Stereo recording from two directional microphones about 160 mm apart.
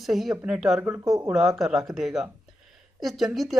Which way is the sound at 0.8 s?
15° right (ahead or behind).